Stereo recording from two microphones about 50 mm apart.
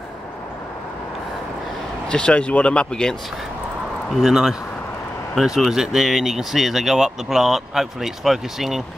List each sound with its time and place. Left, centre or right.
2.0 s speech: centre
4.3 s speech: centre